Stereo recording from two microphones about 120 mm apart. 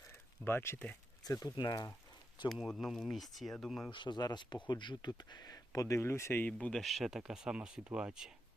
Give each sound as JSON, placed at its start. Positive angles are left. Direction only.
{"t": 0.1, "sound": "a sound", "side_deg": 20}
{"t": 1.2, "sound": "speech", "side_deg": 30}
{"t": 2.5, "sound": "speech", "side_deg": 0}
{"t": 3.9, "sound": "speech", "side_deg": 40}